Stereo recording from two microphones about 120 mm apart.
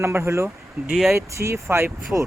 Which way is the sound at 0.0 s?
20° right (ahead or behind).